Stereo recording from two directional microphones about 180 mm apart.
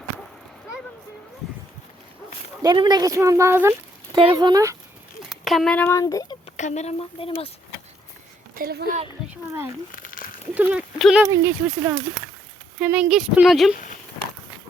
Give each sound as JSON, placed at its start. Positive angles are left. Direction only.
{"t": 2.6, "sound": "speech", "side_deg": -25}
{"t": 4.1, "sound": "speech", "side_deg": -25}
{"t": 5.2, "sound": "a sound", "side_deg": 0}
{"t": 6.0, "sound": "speech", "side_deg": 20}
{"t": 6.4, "sound": "a woman's voice", "side_deg": 40}
{"t": 8.5, "sound": "speech", "side_deg": -60}
{"t": 9.3, "sound": "speech", "side_deg": -10}
{"t": 9.9, "sound": "a sound", "side_deg": 50}
{"t": 10.5, "sound": "speech", "side_deg": -10}
{"t": 11.3, "sound": "speech", "side_deg": -15}